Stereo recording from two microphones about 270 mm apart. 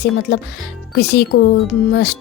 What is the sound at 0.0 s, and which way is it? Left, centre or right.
A woman's voice, left.